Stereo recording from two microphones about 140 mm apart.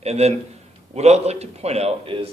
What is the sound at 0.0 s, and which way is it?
A man's voice, 50° right (ahead or behind).